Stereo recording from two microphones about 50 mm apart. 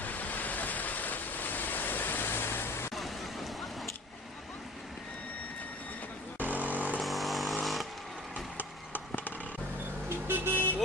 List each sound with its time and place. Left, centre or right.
0.0 s waves: left
2.9 s waves: centre
6.4 s vehicle: right
7.0 s vehicle: centre
8.5 s a sound: left
10.1 s vehicle: right